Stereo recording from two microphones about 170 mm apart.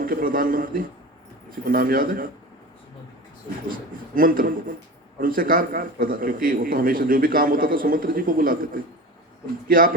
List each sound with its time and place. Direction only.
0.0 s a man's voice: 55° right (ahead or behind)
3.7 s a man's voice: 55° right (ahead or behind)